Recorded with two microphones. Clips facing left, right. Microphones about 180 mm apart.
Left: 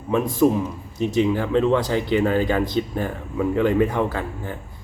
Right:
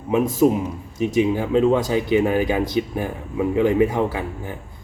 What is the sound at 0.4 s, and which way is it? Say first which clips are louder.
A man's voice: right 1 dB; 20° right (ahead or behind).